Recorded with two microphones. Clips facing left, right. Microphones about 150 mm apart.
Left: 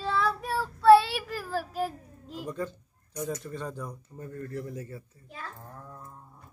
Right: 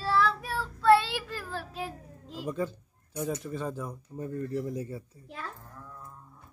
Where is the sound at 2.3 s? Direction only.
5° right (ahead or behind).